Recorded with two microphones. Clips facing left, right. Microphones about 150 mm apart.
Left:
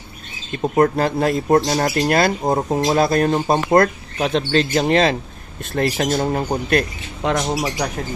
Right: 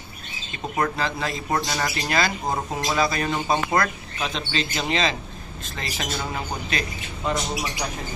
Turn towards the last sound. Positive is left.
turn(degrees=50)  # may be behind; listen again after turning